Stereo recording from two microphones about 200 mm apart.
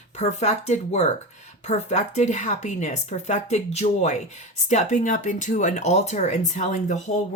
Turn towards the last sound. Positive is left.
turn(degrees=35)  # may be behind; listen again after turning